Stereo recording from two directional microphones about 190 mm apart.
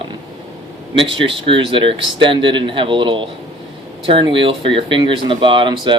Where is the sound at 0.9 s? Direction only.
25° right (ahead or behind).